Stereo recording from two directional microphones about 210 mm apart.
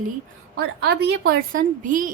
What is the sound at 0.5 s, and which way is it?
Speech, 50° right (ahead or behind).